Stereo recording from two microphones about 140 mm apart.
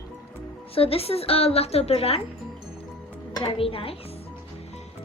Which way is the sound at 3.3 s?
40° left (ahead or behind).